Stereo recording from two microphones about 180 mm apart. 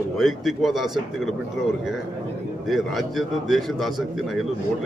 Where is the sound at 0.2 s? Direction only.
Centre (ahead or behind).